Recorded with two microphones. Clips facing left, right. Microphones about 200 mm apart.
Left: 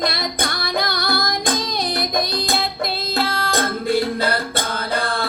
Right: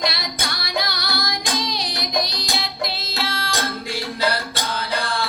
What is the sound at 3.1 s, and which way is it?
Music, 55° left (ahead or behind).